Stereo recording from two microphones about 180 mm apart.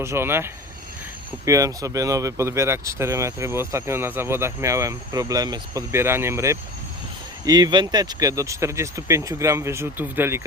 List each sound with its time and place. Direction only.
0.0 s speech: 15° right (ahead or behind)